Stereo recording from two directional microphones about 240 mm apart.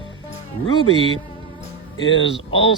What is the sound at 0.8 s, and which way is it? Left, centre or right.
Speech, left.